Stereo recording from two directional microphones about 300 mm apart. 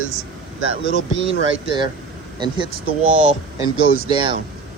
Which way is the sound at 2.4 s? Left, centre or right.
Centre.